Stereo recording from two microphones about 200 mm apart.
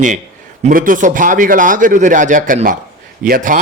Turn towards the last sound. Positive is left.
turn(degrees=-45)  # may be behind; listen again after turning